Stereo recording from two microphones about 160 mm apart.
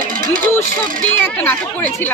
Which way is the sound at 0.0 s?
60° right (ahead or behind).